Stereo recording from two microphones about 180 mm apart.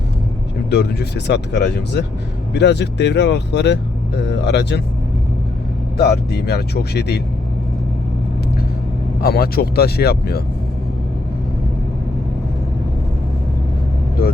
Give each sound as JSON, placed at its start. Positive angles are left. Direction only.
{"t": 0.7, "sound": "speech", "side_deg": 65}
{"t": 6.0, "sound": "speech", "side_deg": 60}
{"t": 9.2, "sound": "speech", "side_deg": 60}